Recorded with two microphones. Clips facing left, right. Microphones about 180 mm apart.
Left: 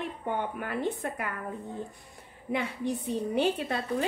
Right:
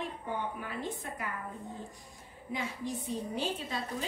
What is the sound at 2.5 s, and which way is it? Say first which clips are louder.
A woman's voice: left 6 dB; 60° left (ahead or behind).